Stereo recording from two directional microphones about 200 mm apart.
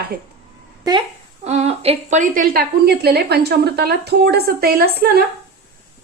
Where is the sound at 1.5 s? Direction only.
30° right (ahead or behind); by 5.2 s 50° right (ahead or behind).